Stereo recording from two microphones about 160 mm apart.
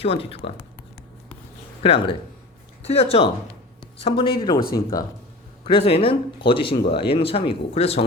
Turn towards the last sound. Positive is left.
turn(degrees=40)  # may be behind; listen again after turning